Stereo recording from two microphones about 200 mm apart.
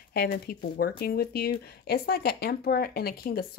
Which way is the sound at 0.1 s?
50° left (ahead or behind).